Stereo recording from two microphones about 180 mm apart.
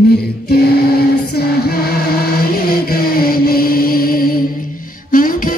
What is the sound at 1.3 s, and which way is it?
Music, 60° left (ahead or behind).